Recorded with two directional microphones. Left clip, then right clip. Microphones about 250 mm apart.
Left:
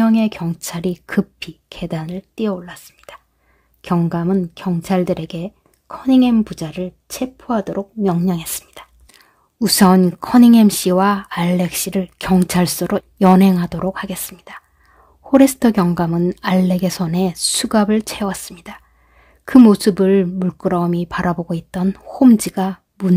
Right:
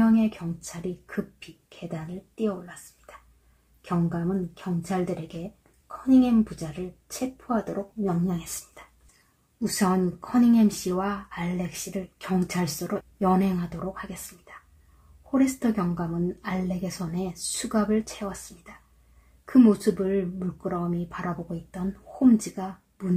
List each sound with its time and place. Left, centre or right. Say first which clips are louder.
0.0 s a woman's voice: left 7 dB; left
6.0 s speech: left 7 dB; left
9.6 s speech: left 12 dB; left